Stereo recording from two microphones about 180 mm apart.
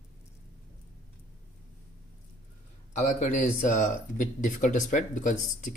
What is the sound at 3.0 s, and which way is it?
Speech, 40° left (ahead or behind).